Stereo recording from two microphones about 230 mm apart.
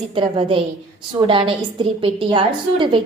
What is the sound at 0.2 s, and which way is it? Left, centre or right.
A woman's voice, right.